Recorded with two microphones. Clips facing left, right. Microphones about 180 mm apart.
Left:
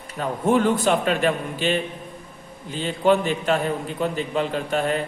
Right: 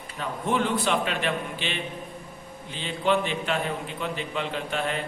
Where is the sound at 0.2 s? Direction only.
45° left (ahead or behind).